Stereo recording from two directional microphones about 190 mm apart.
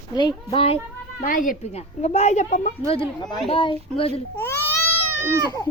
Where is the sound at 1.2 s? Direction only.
45° left (ahead or behind); by 4.2 s 30° left (ahead or behind).